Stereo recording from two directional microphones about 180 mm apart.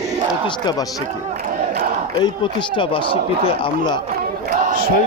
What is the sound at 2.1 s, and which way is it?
Speech, 25° left (ahead or behind).